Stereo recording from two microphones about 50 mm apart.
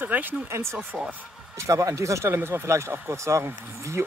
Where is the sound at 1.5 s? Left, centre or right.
Right.